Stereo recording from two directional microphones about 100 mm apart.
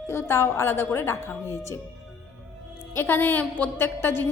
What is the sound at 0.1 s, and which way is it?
A woman's voice, 25° left (ahead or behind).